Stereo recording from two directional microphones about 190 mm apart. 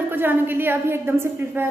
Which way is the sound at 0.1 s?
10° right (ahead or behind).